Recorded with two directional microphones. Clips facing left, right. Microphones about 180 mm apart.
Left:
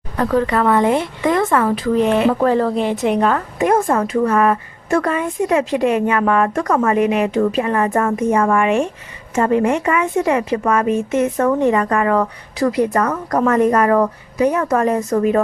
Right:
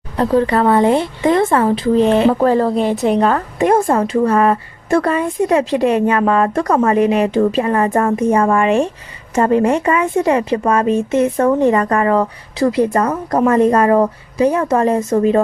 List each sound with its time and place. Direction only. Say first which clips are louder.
0.2 s a woman's voice: right 3 dB; 30° right (ahead or behind)